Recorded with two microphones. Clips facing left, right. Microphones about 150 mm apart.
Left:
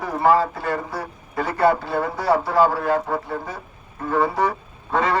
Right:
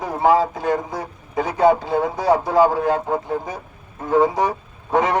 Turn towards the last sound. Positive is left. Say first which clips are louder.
# right 3 dB
turn(degrees=-20)  # may be behind; listen again after turning